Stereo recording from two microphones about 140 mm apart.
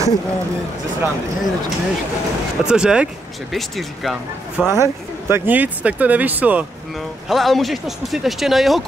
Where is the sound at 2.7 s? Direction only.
5° right (ahead or behind).